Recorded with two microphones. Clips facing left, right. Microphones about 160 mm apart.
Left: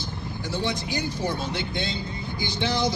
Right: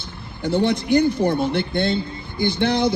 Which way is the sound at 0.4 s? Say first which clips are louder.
Right 10 dB; 55° right (ahead or behind).